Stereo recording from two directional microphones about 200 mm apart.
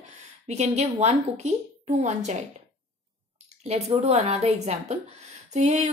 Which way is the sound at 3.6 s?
30° right (ahead or behind).